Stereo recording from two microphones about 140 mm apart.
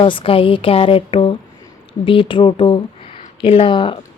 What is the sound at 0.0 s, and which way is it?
Speech, 35° left (ahead or behind).